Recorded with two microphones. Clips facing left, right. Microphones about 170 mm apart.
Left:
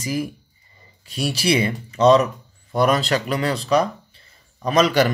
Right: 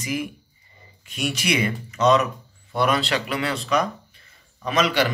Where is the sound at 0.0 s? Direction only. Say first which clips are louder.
Left 3 dB; 35° left (ahead or behind).